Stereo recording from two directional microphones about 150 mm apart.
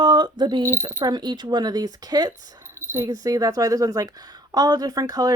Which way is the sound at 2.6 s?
15° right (ahead or behind).